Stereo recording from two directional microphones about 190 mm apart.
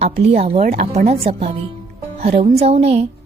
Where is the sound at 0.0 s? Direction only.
35° right (ahead or behind).